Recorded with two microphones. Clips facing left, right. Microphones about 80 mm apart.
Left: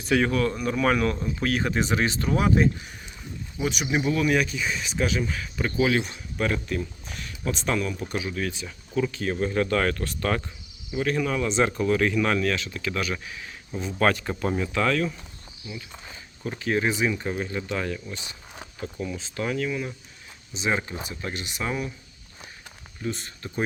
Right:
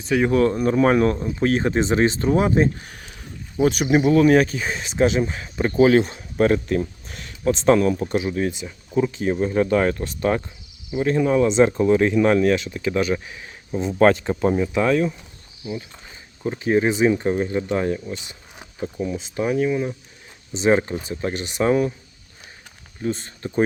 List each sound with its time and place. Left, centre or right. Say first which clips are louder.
0.3 s speech: right 7 dB; right
2.8 s speech: right 2 dB; right
3.6 s speech: right 8 dB; right
8.0 s speech: right 7 dB; right
16.4 s speech: right 6 dB; right
18.6 s a sound: right 6 dB; centre
19.4 s speech: right 7 dB; right
20.6 s speech: right 9 dB; right
23.0 s speech: right 6 dB; right